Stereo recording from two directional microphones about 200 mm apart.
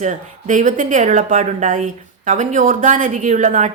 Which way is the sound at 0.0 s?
40° right (ahead or behind).